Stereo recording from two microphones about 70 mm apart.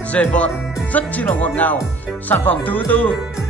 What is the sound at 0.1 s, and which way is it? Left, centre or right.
Music, left.